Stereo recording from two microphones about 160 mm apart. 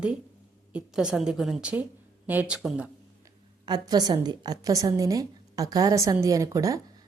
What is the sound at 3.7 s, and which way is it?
A woman's voice, 25° right (ahead or behind).